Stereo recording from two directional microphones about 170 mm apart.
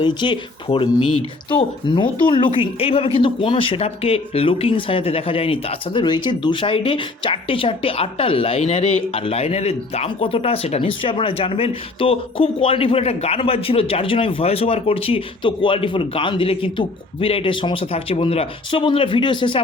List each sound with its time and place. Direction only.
0.0 s a woman's voice: 25° left (ahead or behind)